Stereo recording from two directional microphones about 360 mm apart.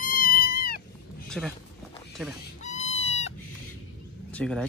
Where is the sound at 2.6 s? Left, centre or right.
Centre.